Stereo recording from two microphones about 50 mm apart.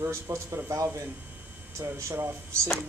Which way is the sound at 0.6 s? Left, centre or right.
Right.